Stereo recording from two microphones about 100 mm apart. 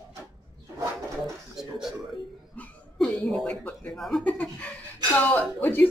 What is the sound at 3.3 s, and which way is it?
Speech, 10° left (ahead or behind).